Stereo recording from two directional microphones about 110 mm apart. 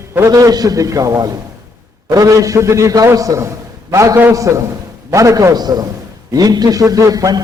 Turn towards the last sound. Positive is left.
turn(degrees=-35)  # may be behind; listen again after turning